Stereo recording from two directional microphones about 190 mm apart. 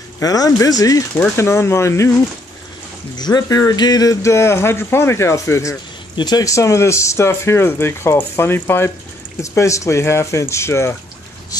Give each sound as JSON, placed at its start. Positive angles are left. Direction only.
{"t": 0.2, "sound": "speech", "side_deg": 20}
{"t": 3.2, "sound": "speech", "side_deg": 20}